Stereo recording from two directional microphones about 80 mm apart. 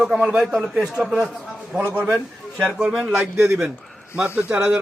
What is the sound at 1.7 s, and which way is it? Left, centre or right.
Speech, centre.